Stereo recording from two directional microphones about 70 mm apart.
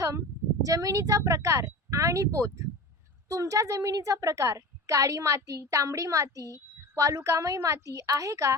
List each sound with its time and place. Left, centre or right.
0.0 s a woman's voice: right